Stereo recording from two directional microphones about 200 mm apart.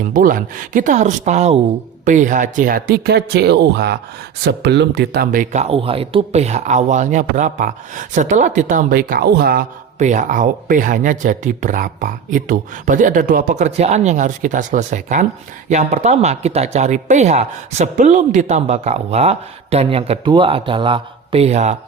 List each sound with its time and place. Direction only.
0.1 s speech: 40° right (ahead or behind)